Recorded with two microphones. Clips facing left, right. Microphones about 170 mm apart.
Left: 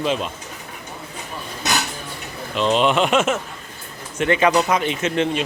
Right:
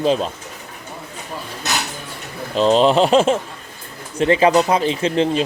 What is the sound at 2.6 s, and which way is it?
Speech, 35° right (ahead or behind).